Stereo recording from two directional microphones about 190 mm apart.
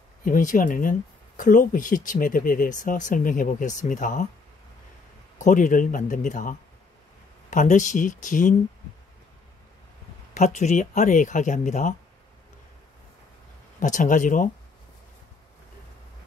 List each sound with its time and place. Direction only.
0.2 s speech: 45° left (ahead or behind)
5.4 s speech: 45° left (ahead or behind)
10.3 s speech: 40° left (ahead or behind)
13.7 s speech: 40° left (ahead or behind)